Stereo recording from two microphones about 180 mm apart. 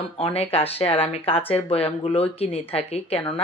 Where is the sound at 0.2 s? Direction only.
35° left (ahead or behind).